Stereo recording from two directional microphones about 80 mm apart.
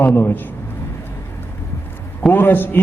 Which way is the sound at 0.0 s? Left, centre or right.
Left.